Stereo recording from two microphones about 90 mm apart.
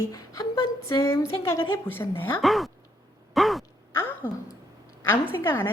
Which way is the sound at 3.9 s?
25° left (ahead or behind).